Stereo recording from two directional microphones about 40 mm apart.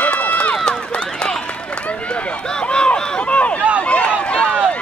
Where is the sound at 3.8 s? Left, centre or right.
Left.